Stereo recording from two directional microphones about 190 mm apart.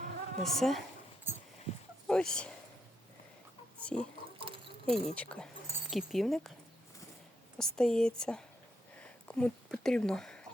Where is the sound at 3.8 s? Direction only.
5° left (ahead or behind).